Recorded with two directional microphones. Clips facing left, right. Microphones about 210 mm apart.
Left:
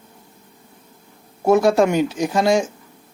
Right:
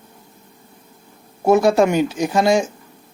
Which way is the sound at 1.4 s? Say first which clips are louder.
Right 1 dB; 5° right (ahead or behind).